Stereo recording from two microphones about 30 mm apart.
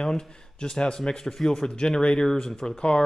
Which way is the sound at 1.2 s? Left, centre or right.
Centre.